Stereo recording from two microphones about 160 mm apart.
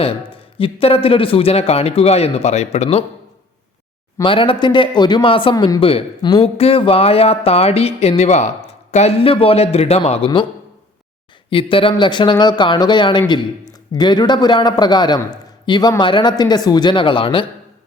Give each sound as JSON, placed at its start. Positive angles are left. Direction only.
{"t": 0.0, "sound": "speech", "side_deg": 35}
{"t": 4.2, "sound": "speech", "side_deg": 35}
{"t": 11.5, "sound": "a man's voice", "side_deg": 35}